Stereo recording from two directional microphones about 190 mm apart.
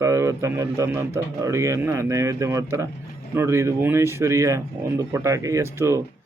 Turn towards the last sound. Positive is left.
turn(degrees=-15)  # may be behind; listen again after turning